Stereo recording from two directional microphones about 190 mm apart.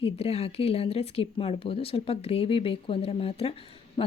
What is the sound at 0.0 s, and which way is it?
Speech, 30° left (ahead or behind).